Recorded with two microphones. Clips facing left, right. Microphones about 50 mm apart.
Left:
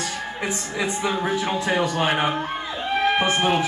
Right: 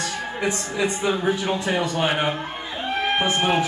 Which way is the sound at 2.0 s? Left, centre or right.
Centre.